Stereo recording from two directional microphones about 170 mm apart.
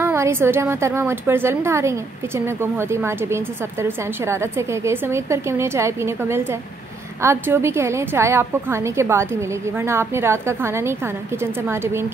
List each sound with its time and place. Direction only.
0.0 s a woman's voice: 15° right (ahead or behind)